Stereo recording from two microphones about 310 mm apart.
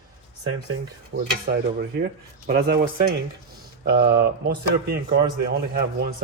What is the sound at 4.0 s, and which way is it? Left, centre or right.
Speech, right.